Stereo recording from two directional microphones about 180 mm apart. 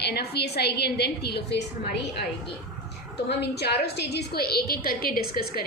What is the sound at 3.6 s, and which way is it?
A woman's voice, 65° left (ahead or behind).